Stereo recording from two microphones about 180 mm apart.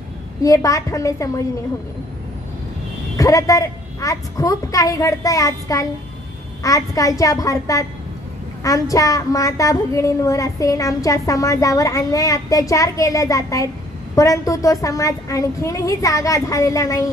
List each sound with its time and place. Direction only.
0.4 s a woman's voice: 20° left (ahead or behind)
3.2 s a woman's voice: 20° left (ahead or behind)